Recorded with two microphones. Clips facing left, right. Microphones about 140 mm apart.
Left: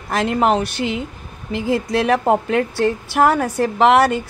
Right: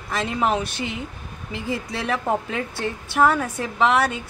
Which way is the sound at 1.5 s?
85° left.